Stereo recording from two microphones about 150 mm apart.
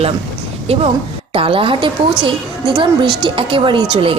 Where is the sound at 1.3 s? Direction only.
35° right (ahead or behind).